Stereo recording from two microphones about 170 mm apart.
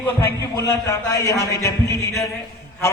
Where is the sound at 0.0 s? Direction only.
15° left (ahead or behind).